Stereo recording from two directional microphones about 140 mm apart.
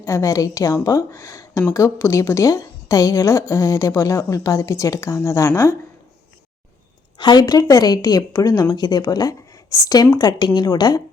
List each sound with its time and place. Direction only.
0.0 s a woman's voice: 20° left (ahead or behind)
7.2 s a woman's voice: 30° left (ahead or behind)